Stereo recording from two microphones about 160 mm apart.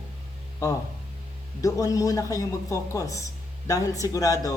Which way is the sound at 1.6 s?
20° left (ahead or behind).